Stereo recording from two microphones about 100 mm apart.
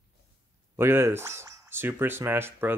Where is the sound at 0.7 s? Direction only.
25° right (ahead or behind).